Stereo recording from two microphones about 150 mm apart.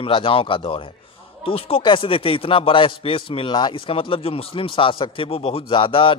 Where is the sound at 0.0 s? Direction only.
35° left (ahead or behind).